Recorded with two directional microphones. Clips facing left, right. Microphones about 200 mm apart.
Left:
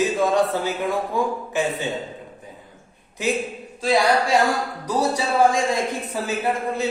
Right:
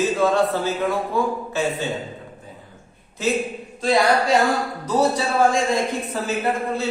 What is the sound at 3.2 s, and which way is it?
Speech, 15° left (ahead or behind).